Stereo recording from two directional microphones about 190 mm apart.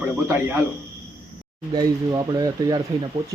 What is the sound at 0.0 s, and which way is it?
Speech, 10° right (ahead or behind).